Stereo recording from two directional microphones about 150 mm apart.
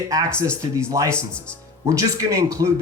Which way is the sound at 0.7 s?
20° right (ahead or behind).